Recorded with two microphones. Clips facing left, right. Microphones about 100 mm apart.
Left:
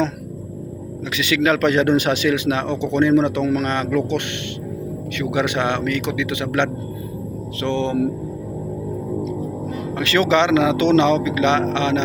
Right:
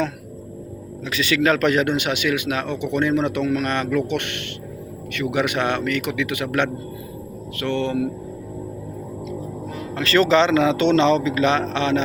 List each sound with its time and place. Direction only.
1.1 s a man's voice: 20° left (ahead or behind)
10.0 s a man's voice: 15° left (ahead or behind)